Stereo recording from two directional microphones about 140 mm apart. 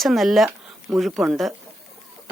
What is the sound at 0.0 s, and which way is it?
Speech, centre (ahead or behind).